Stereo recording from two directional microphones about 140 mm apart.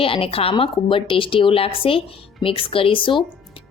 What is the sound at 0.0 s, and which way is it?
A woman's voice, 40° left (ahead or behind).